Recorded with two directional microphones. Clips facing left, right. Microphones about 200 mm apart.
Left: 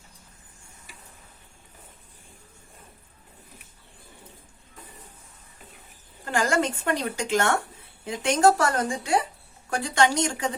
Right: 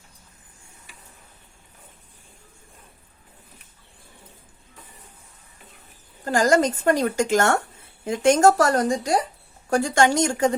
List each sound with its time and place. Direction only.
6.2 s a woman's voice: 40° right (ahead or behind)